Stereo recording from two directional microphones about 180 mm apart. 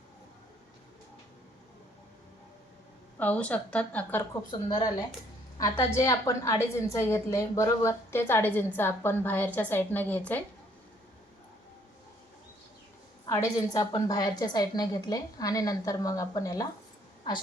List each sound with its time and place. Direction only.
3.2 s a woman's voice: 10° left (ahead or behind)
4.5 s a woman's voice: 30° left (ahead or behind); by 10.4 s 10° left (ahead or behind)
13.2 s a woman's voice: 15° left (ahead or behind)